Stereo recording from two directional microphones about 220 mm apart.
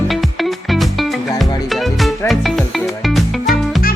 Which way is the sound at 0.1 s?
Centre (ahead or behind).